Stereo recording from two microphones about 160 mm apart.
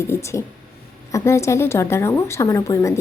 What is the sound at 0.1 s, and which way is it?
A woman's voice, 15° left (ahead or behind).